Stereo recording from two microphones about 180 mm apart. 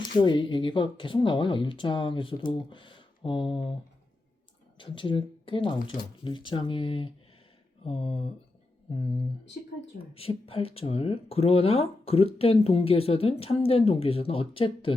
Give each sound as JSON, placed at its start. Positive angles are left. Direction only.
{"t": 0.0, "sound": "speech", "side_deg": 25}
{"t": 4.8, "sound": "speech", "side_deg": 25}